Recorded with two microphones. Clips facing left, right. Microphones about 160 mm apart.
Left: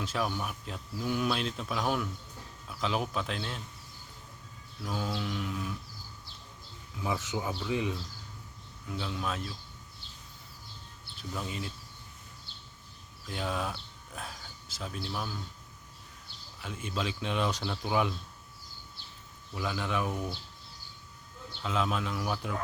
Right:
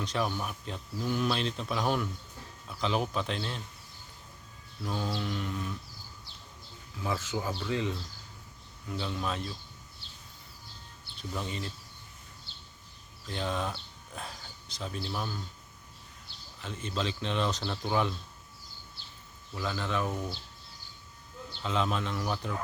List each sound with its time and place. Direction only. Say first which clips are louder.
0.0 s speech: right 1 dB; 5° left (ahead or behind)
4.8 s speech: right 1 dB; centre (ahead or behind)
7.0 s speech: even; 15° left (ahead or behind)
8.9 s speech: right 1 dB; centre (ahead or behind)
11.2 s speech: right 1 dB; 5° left (ahead or behind)
13.2 s speech: right 1 dB; 5° left (ahead or behind)
16.6 s speech: right 1 dB; 10° left (ahead or behind)
19.5 s speech: even; 10° left (ahead or behind)
21.6 s speech: right 1 dB; 5° left (ahead or behind)